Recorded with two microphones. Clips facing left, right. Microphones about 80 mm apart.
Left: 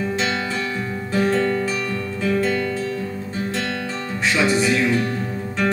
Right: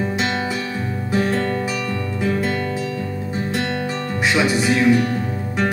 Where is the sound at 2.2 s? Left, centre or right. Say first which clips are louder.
Left 1 dB; centre.